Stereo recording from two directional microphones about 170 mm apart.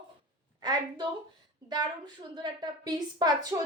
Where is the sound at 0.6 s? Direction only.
25° right (ahead or behind).